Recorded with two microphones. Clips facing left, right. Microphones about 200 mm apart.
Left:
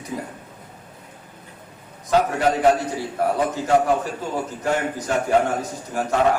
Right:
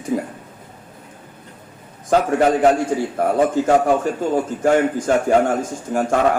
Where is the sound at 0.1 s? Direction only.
50° right (ahead or behind).